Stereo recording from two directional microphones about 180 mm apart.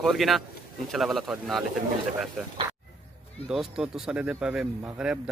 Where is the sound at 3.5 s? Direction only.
5° right (ahead or behind).